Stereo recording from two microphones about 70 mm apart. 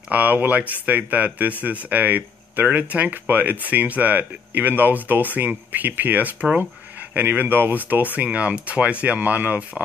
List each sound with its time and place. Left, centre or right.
0.1 s speech: right